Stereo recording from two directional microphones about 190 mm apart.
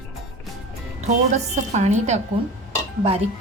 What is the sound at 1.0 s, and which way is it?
A woman's voice, 35° right (ahead or behind).